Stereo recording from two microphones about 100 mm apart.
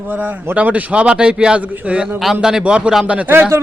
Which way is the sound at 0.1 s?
20° right (ahead or behind).